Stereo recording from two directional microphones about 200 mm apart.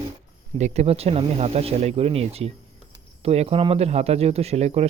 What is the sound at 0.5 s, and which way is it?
Speech, 35° right (ahead or behind).